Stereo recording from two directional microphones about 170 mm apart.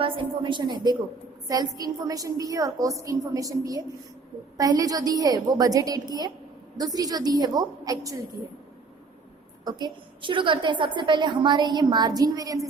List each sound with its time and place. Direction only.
0.0 s a woman's voice: 30° right (ahead or behind)
9.6 s a woman's voice: 25° right (ahead or behind)